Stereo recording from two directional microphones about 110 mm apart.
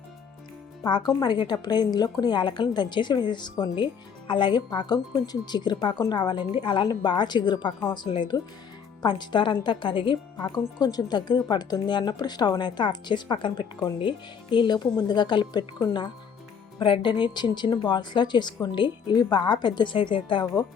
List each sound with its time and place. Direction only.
0.9 s a woman's voice: 40° left (ahead or behind)
10.5 s a woman's voice: 35° left (ahead or behind)